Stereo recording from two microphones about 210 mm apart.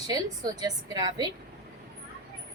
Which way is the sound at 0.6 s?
20° right (ahead or behind).